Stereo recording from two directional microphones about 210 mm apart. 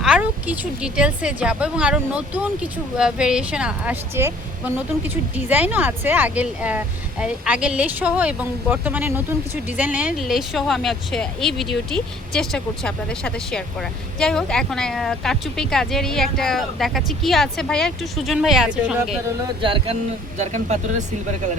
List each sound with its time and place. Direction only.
0.0 s speech: 5° right (ahead or behind)
19.6 s speech: 25° right (ahead or behind)